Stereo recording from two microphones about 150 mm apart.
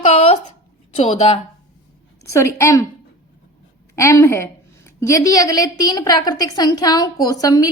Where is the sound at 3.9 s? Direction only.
20° left (ahead or behind).